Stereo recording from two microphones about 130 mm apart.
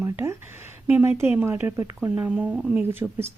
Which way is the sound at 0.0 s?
20° right (ahead or behind).